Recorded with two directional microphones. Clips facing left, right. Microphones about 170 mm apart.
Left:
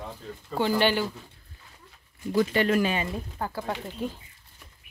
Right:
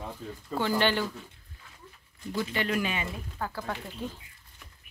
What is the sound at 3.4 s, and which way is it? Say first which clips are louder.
Speech: left 2 dB; 25° left (ahead or behind).